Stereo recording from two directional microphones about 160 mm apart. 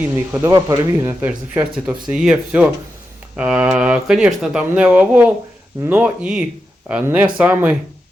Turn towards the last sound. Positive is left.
turn(degrees=-10)  # may be behind; listen again after turning